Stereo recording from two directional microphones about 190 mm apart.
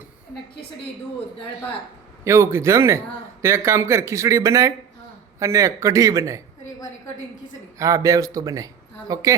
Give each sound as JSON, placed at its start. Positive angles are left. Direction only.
{"t": 2.2, "sound": "speech", "side_deg": -15}
{"t": 7.8, "sound": "speech", "side_deg": -15}